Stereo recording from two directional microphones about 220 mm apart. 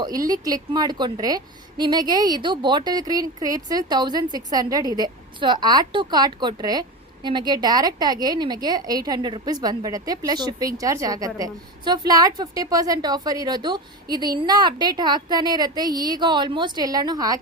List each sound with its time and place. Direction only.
0.0 s speech: 15° right (ahead or behind)